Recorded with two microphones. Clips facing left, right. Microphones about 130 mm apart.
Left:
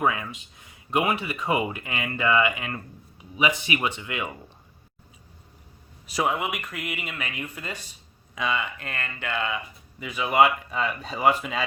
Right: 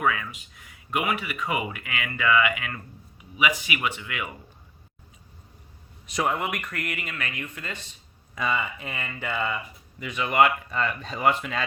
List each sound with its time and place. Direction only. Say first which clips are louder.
0.0 s speech: left 1 dB; 25° left (ahead or behind)
6.1 s speech: left 1 dB; 5° left (ahead or behind)
8.4 s speech: even; centre (ahead or behind)